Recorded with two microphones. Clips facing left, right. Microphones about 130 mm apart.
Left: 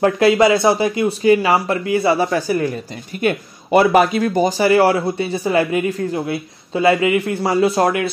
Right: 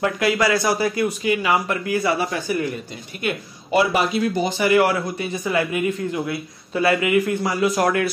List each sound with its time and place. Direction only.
0.0 s speech: 25° left (ahead or behind)
1.2 s a man's voice: 35° left (ahead or behind)
3.3 s a man's voice: 50° left (ahead or behind); by 7.9 s 30° left (ahead or behind)